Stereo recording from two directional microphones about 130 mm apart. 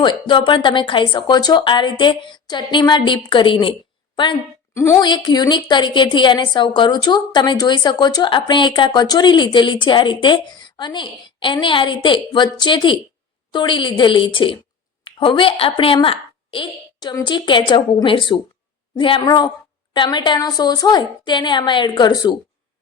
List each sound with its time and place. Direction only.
0.0 s a woman's voice: 35° left (ahead or behind)
4.7 s a woman's voice: 20° left (ahead or behind)
4.9 s a woman's voice: 35° left (ahead or behind)